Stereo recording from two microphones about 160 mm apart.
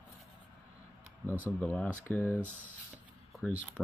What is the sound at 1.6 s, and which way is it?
Speech, 10° left (ahead or behind).